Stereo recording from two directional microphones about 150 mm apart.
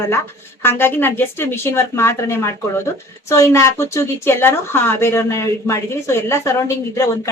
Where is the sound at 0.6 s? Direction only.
15° left (ahead or behind).